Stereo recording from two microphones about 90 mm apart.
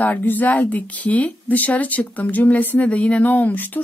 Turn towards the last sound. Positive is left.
turn(degrees=20)  # may be behind; listen again after turning